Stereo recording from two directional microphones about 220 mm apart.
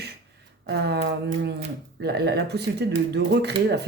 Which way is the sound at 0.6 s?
50° right (ahead or behind).